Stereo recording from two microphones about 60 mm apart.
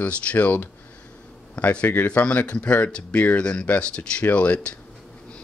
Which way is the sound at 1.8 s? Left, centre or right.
Left.